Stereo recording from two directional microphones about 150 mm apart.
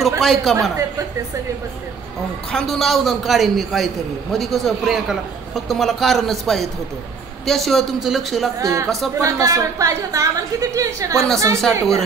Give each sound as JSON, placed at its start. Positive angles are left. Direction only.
{"t": 0.2, "sound": "a man's voice", "side_deg": 0}
{"t": 0.6, "sound": "a woman's voice", "side_deg": -20}
{"t": 2.5, "sound": "a man's voice", "side_deg": 5}
{"t": 8.5, "sound": "a woman's voice", "side_deg": -20}